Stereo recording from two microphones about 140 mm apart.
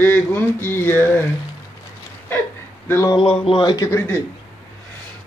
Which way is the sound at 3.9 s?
20° left (ahead or behind).